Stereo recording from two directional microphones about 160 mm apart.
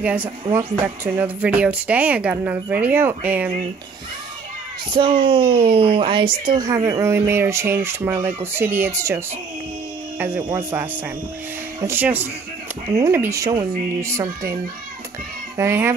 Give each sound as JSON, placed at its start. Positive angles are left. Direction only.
{"t": 0.0, "sound": "speech", "side_deg": -10}
{"t": 4.9, "sound": "speech", "side_deg": -35}
{"t": 6.6, "sound": "speech", "side_deg": -20}
{"t": 15.5, "sound": "speech", "side_deg": -15}